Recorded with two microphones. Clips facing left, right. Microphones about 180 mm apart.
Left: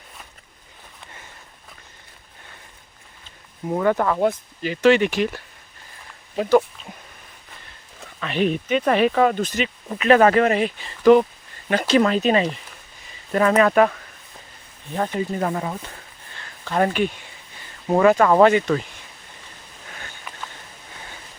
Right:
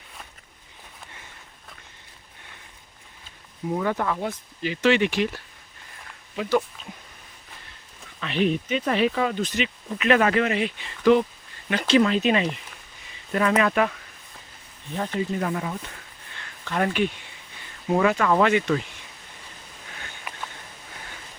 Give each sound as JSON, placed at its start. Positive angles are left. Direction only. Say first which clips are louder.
{"t": 3.8, "sound": "speech", "louder": "left 7 dB", "side_deg": 50}
{"t": 8.2, "sound": "speech", "louder": "left 2 dB", "side_deg": 50}
{"t": 15.3, "sound": "speech", "louder": "left 3 dB", "side_deg": 35}
{"t": 16.3, "sound": "a sound", "louder": "left 4 dB", "side_deg": 35}
{"t": 17.8, "sound": "speech", "louder": "left 5 dB", "side_deg": 40}